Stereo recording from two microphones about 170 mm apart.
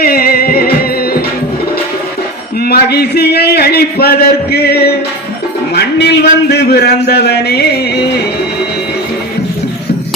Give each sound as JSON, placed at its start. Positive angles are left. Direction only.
{"t": 0.0, "sound": "music", "side_deg": 60}
{"t": 2.6, "sound": "a sound", "side_deg": 70}
{"t": 5.7, "sound": "a man's voice", "side_deg": 75}
{"t": 7.1, "sound": "music", "side_deg": 70}